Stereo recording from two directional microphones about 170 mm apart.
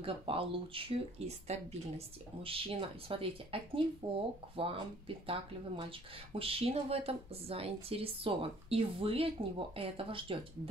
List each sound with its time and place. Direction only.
0.0 s speech: 30° right (ahead or behind)